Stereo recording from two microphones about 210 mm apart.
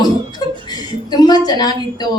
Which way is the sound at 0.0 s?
20° left (ahead or behind).